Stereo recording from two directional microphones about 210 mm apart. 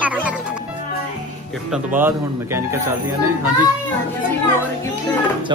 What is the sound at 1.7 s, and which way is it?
Speech, 10° right (ahead or behind).